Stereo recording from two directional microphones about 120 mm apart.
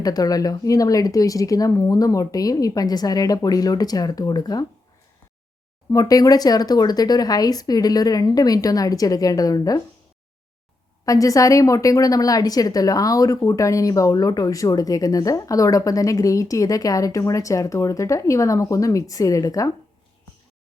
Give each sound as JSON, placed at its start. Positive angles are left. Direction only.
{"t": 0.0, "sound": "speech", "side_deg": 30}
{"t": 5.9, "sound": "speech", "side_deg": 30}
{"t": 11.0, "sound": "a woman's voice", "side_deg": 30}